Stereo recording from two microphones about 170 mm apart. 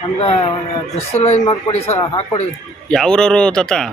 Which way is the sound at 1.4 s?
30° left (ahead or behind).